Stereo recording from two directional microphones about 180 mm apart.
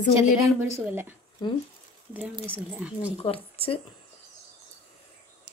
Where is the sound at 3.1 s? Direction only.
35° left (ahead or behind).